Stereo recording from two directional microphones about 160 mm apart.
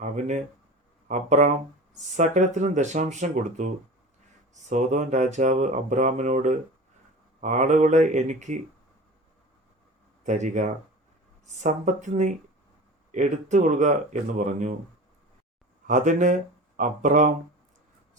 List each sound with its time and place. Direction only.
0.0 s speech: 50° right (ahead or behind)
10.2 s speech: 50° right (ahead or behind)
15.9 s speech: 50° right (ahead or behind)